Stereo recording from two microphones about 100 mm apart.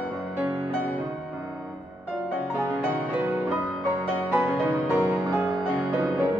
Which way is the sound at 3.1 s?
20° right (ahead or behind).